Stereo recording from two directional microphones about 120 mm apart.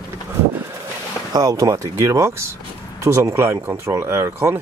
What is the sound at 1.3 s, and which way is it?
Speech, 30° right (ahead or behind).